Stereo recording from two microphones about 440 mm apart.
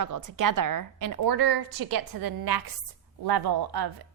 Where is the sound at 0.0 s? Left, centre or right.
Right.